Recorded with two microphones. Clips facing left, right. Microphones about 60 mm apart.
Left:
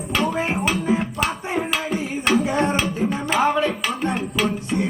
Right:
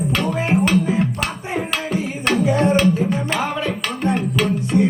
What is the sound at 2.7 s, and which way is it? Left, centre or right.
Music, centre.